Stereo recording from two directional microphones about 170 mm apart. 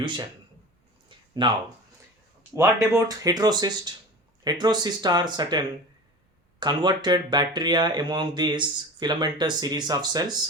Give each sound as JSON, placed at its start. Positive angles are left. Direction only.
{"t": 0.0, "sound": "a man's voice", "side_deg": -25}
{"t": 1.4, "sound": "speech", "side_deg": -30}
{"t": 2.6, "sound": "speech", "side_deg": -15}